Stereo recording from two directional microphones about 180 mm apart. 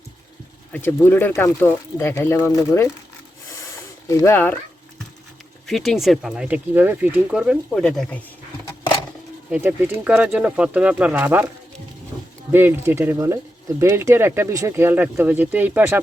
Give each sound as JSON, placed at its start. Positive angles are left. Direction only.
{"t": 0.7, "sound": "speech", "side_deg": 10}
{"t": 3.5, "sound": "a sound", "side_deg": 15}
{"t": 4.2, "sound": "speech", "side_deg": 10}
{"t": 5.6, "sound": "speech", "side_deg": 0}
{"t": 9.5, "sound": "speech", "side_deg": -10}
{"t": 12.5, "sound": "speech", "side_deg": -10}